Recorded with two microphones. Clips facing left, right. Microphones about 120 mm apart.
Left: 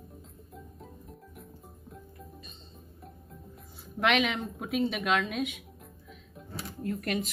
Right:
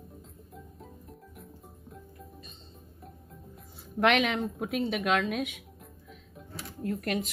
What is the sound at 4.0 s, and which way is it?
Speech, 40° right (ahead or behind).